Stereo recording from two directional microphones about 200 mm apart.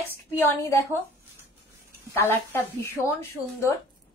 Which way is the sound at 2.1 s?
10° left (ahead or behind).